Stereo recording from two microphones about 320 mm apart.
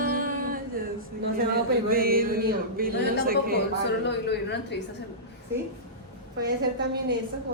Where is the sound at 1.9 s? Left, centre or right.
Right.